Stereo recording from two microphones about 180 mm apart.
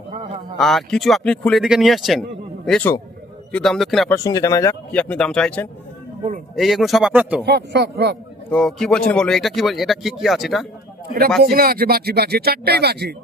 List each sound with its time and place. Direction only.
0.6 s speech: centre (ahead or behind)
4.1 s speech: 20° left (ahead or behind)
4.9 s speech: 5° left (ahead or behind)
7.4 s speech: 65° right (ahead or behind)
8.4 s speech: 5° left (ahead or behind)
11.4 s speech: 55° right (ahead or behind)